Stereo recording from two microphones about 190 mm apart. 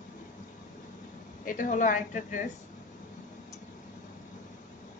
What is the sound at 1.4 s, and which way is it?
Speech, 45° left (ahead or behind).